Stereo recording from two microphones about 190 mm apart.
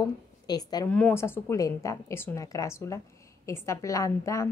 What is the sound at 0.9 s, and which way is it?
A woman's voice, 5° left (ahead or behind).